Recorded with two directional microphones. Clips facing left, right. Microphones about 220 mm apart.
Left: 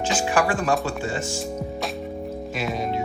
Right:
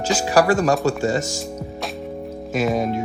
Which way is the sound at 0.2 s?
40° right (ahead or behind).